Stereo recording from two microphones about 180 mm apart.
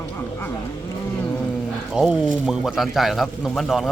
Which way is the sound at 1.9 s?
5° right (ahead or behind).